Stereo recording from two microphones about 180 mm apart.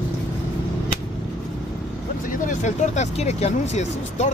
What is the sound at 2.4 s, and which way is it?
Speech, 40° left (ahead or behind).